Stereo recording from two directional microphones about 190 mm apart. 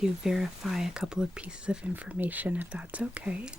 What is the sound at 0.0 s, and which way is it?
Speech, centre (ahead or behind).